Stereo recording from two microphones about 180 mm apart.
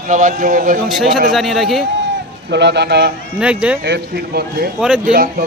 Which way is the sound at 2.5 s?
70° right (ahead or behind).